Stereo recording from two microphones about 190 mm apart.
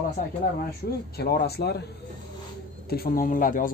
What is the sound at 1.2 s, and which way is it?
Speech, 55° left (ahead or behind).